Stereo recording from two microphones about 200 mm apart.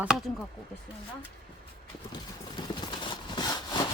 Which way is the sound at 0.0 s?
Centre (ahead or behind).